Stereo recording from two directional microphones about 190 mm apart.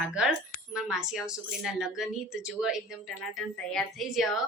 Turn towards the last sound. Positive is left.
turn(degrees=0)  # may be behind; listen again after turning